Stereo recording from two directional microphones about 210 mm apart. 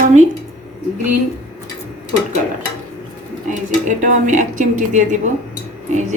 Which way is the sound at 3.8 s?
35° right (ahead or behind).